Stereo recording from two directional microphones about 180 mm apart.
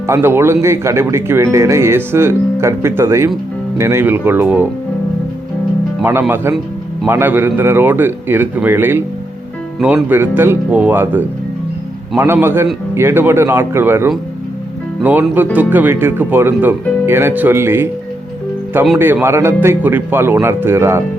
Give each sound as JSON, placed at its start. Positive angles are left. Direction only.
{"t": 0.1, "sound": "speech", "side_deg": -15}
{"t": 6.0, "sound": "speech", "side_deg": -10}
{"t": 18.9, "sound": "speech", "side_deg": -10}